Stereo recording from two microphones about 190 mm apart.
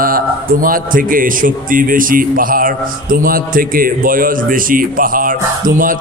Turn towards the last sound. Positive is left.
turn(degrees=-45)  # may be behind; listen again after turning